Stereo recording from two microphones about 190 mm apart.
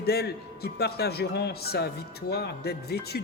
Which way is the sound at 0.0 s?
55° left (ahead or behind).